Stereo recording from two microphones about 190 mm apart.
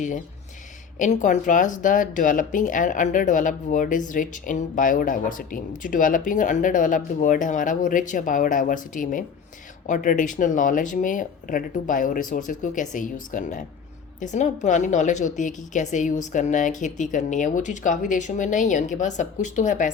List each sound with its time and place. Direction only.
0.9 s speech: 40° left (ahead or behind)